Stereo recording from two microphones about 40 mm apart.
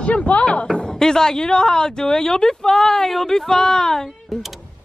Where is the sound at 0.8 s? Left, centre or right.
Centre.